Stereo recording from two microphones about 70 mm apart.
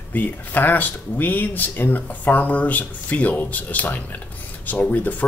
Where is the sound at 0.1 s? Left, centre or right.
Left.